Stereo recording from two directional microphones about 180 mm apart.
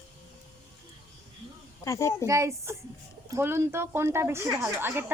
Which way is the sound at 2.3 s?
15° right (ahead or behind).